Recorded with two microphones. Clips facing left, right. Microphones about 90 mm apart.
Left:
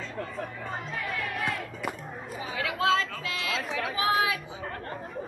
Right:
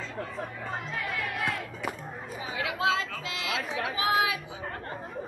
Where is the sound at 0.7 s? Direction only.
Centre (ahead or behind).